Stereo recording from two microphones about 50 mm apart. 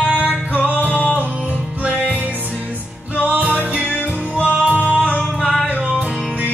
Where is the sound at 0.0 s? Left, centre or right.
Right.